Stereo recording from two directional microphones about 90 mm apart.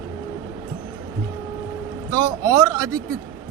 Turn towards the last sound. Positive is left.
turn(degrees=-40)  # may be behind; listen again after turning